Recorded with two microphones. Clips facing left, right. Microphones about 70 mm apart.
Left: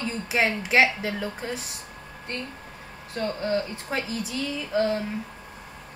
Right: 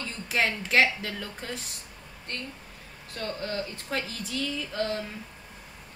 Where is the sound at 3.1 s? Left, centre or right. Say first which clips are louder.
Left 6 dB; left.